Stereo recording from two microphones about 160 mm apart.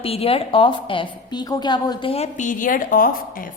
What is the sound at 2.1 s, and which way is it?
A woman's voice, 45° left (ahead or behind).